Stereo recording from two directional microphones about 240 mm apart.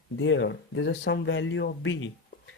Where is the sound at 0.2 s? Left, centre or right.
Left.